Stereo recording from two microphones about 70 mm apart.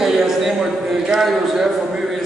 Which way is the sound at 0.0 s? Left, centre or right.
Centre.